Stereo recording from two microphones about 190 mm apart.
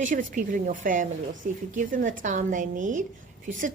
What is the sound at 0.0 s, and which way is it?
A woman's voice, 40° right (ahead or behind).